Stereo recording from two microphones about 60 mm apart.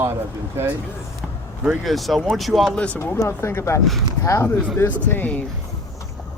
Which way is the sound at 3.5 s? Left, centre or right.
Left.